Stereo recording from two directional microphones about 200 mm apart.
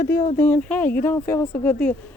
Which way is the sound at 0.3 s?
10° left (ahead or behind).